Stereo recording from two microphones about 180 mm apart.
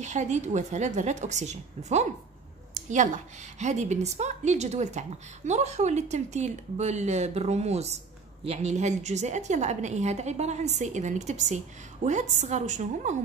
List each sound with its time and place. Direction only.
0.0 s a woman's voice: 40° right (ahead or behind)
2.7 s a sound: 45° right (ahead or behind)
3.5 s a woman's voice: 40° right (ahead or behind)